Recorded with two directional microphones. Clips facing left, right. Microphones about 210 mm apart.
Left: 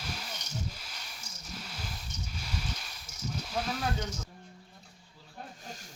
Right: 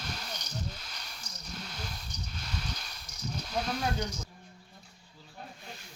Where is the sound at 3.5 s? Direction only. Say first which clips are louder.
Right 1 dB; 5° left (ahead or behind).